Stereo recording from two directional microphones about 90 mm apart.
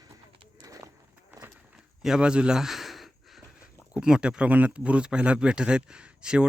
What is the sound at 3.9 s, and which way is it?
Speech, 10° right (ahead or behind).